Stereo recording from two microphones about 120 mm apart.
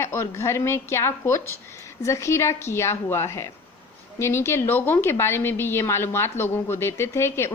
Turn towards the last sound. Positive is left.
turn(degrees=20)  # may be behind; listen again after turning